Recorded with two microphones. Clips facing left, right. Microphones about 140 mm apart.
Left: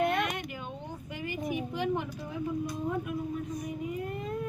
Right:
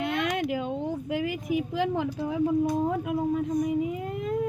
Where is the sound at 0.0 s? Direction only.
90° right.